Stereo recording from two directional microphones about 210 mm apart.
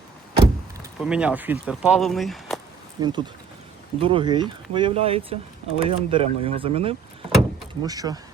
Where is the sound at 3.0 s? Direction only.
20° right (ahead or behind).